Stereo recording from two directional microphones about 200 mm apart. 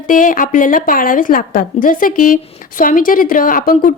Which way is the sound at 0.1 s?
40° left (ahead or behind).